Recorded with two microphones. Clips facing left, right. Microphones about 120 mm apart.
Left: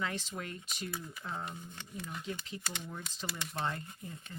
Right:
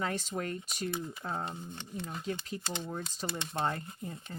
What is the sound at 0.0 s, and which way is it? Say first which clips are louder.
Speech: right 4 dB; 40° right (ahead or behind).